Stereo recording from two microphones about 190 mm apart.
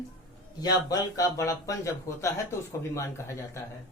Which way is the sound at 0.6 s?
20° left (ahead or behind).